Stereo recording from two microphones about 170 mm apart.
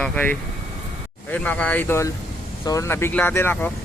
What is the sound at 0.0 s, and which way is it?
Speech, 10° left (ahead or behind).